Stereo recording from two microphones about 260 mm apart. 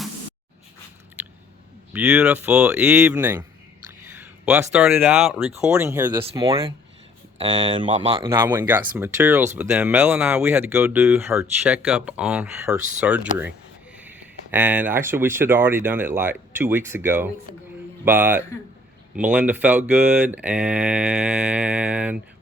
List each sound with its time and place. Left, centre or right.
1.9 s speech: centre; by 8.2 s right
8.2 s speech: centre